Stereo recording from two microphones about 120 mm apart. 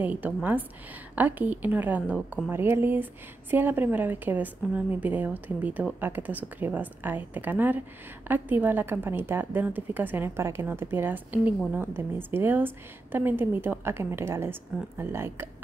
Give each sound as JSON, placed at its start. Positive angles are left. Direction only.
{"t": 0.0, "sound": "a woman's voice", "side_deg": -15}